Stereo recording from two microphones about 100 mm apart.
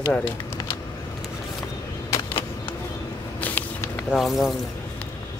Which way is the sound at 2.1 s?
30° left (ahead or behind).